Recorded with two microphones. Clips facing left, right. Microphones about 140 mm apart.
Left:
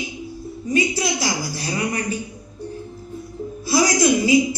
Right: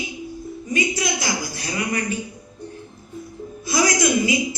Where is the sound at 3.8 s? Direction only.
35° left (ahead or behind).